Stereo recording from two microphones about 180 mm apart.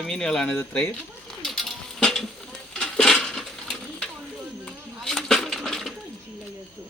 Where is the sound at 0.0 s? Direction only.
5° left (ahead or behind).